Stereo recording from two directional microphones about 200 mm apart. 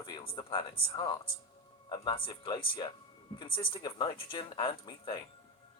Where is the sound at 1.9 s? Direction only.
25° left (ahead or behind).